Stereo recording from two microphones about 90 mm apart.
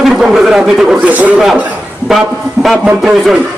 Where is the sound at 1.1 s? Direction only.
15° right (ahead or behind).